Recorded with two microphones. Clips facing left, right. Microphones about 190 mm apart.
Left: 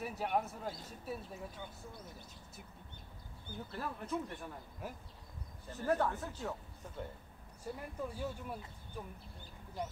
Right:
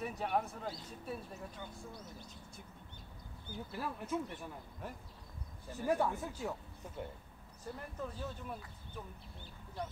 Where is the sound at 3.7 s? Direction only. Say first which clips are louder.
Right 1 dB; 5° right (ahead or behind).